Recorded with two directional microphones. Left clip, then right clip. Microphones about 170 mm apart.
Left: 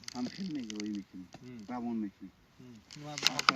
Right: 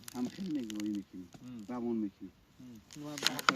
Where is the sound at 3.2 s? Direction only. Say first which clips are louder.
Left 2 dB; 45° right (ahead or behind).